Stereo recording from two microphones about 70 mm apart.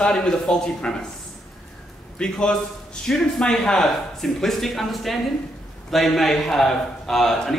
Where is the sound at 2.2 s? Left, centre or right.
Centre.